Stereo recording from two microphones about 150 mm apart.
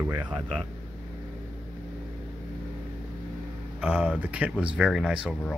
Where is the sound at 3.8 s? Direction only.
10° right (ahead or behind).